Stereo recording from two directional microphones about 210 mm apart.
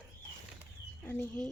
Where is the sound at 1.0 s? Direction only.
10° left (ahead or behind).